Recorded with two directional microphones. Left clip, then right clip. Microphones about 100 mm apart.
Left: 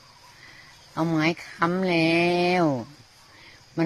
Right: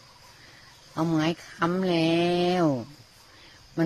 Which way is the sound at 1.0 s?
20° left (ahead or behind).